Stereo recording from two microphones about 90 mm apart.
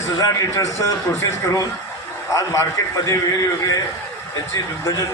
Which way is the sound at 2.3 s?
35° left (ahead or behind).